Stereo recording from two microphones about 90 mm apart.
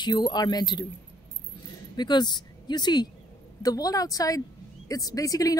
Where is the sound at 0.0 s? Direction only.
50° left (ahead or behind).